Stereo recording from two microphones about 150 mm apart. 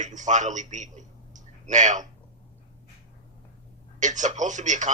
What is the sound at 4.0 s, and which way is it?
Speech, 55° right (ahead or behind).